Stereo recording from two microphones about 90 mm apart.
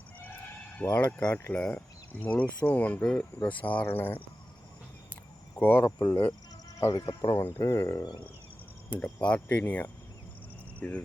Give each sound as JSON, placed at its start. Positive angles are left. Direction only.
{"t": 0.9, "sound": "speech", "side_deg": 15}
{"t": 5.5, "sound": "speech", "side_deg": 25}
{"t": 5.8, "sound": "speech", "side_deg": 45}
{"t": 7.3, "sound": "speech", "side_deg": 30}
{"t": 8.9, "sound": "speech", "side_deg": 15}
{"t": 10.8, "sound": "cricket", "side_deg": 15}